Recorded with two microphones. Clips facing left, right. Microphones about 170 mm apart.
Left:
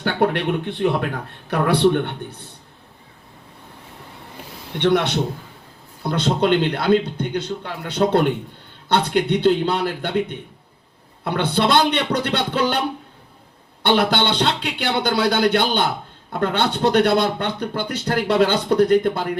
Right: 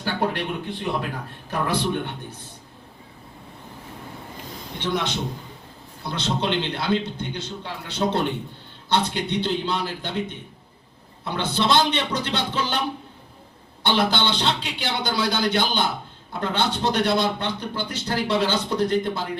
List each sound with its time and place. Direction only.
0.0 s speech: 65° left (ahead or behind)
4.8 s speech: 65° left (ahead or behind)
6.0 s speech: 55° left (ahead or behind)
11.2 s speech: 60° left (ahead or behind)
13.8 s speech: 60° left (ahead or behind)